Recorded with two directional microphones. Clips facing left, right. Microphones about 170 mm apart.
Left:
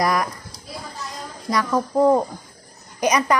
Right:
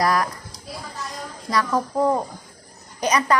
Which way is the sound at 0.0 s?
15° left (ahead or behind).